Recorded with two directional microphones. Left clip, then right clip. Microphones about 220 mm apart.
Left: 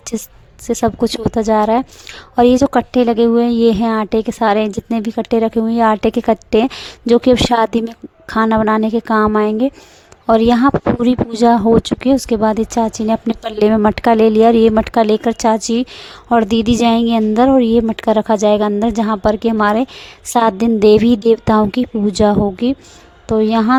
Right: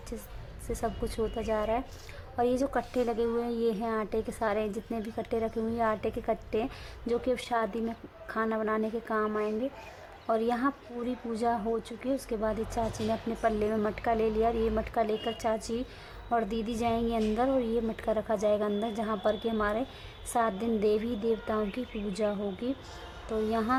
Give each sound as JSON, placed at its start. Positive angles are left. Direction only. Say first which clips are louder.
{"t": 0.7, "sound": "a woman's voice", "louder": "left 18 dB", "side_deg": 45}